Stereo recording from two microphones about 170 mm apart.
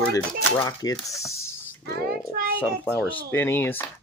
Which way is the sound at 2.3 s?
65° right (ahead or behind).